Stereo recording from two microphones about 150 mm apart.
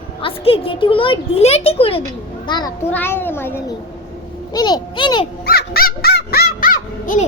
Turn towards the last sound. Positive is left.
turn(degrees=65)  # may be behind; listen again after turning